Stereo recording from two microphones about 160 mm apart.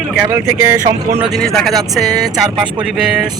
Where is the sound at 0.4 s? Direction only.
15° right (ahead or behind).